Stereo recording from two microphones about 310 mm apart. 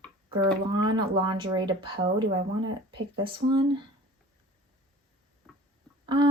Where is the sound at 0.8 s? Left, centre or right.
Centre.